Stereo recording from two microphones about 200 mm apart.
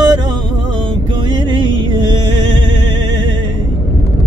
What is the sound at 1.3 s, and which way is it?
Music, 25° right (ahead or behind).